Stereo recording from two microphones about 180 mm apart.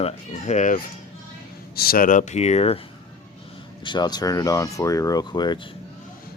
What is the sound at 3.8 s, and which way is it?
Speech, 25° left (ahead or behind).